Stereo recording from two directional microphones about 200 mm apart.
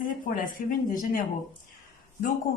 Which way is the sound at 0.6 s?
40° left (ahead or behind).